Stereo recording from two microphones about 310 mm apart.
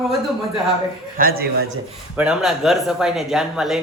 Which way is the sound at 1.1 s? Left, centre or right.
Right.